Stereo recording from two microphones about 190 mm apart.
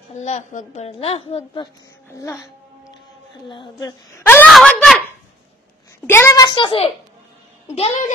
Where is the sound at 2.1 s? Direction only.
15° left (ahead or behind).